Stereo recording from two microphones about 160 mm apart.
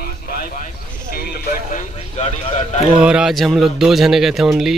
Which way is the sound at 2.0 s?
45° left (ahead or behind).